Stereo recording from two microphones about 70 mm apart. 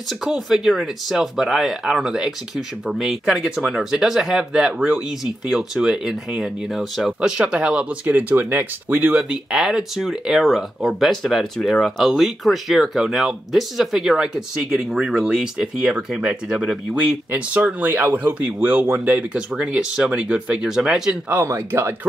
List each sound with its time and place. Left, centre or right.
0.2 s speech: centre
7.2 s speech: centre
9.3 s speech: centre
21.3 s speech: right